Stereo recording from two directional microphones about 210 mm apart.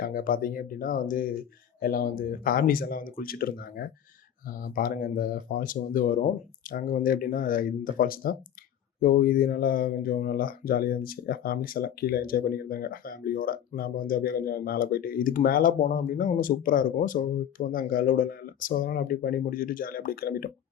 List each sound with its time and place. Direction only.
0.0 s speech: 40° left (ahead or behind)